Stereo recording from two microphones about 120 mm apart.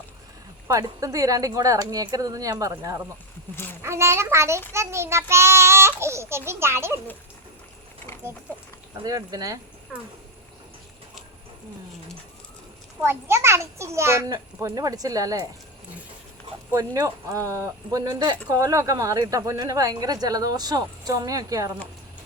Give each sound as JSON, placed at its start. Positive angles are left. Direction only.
{"t": 0.7, "sound": "speech", "side_deg": -30}
{"t": 3.5, "sound": "a child's voice", "side_deg": 20}
{"t": 3.8, "sound": "speech", "side_deg": -25}
{"t": 9.0, "sound": "speech", "side_deg": -30}
{"t": 13.0, "sound": "speech", "side_deg": -20}
{"t": 16.7, "sound": "speech", "side_deg": -30}